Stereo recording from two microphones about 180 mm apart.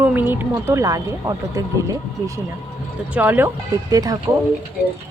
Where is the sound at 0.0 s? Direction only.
10° right (ahead or behind).